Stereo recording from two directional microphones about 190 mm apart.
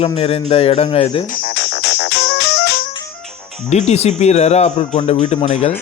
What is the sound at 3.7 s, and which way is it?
A man's voice, 35° left (ahead or behind).